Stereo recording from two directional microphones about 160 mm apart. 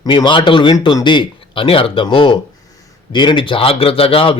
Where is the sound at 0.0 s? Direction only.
25° left (ahead or behind).